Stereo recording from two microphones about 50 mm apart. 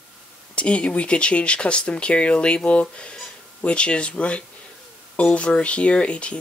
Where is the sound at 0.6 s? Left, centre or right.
Left.